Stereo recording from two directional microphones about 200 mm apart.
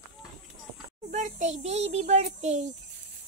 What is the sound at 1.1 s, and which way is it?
A child's voice, 35° right (ahead or behind).